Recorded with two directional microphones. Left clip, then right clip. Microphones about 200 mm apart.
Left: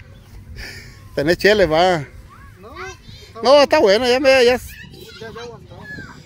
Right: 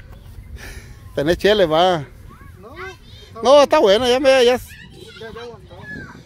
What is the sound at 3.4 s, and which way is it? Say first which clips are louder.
Speech: even; 5° left (ahead or behind).